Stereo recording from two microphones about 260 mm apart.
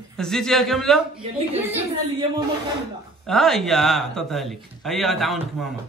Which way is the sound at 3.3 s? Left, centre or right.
Centre.